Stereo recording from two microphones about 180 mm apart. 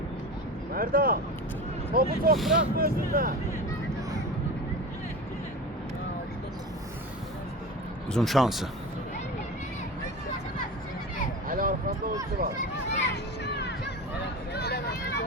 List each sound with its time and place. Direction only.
0.7 s speech: 55° right (ahead or behind)
2.3 s speech: centre (ahead or behind)
2.7 s speech: 55° right (ahead or behind)
8.1 s speech: centre (ahead or behind)
11.4 s a sound: 50° right (ahead or behind)
12.4 s speech: 55° right (ahead or behind)
12.9 s a sound: 70° left (ahead or behind)